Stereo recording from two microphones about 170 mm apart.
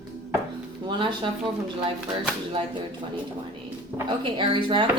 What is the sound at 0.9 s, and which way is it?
Speech, 30° right (ahead or behind).